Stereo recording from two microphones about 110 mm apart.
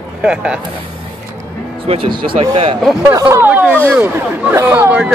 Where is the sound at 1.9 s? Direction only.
50° right (ahead or behind).